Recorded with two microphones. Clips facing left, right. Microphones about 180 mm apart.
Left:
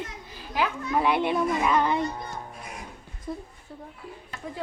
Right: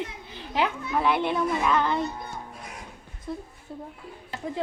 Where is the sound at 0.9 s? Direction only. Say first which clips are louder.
Left 1 dB; 5° left (ahead or behind).